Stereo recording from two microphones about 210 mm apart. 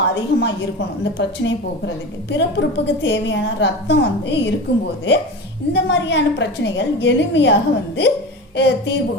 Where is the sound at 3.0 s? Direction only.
60° left (ahead or behind).